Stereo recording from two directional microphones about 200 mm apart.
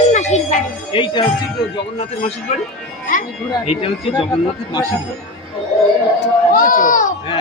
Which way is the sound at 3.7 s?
30° left (ahead or behind).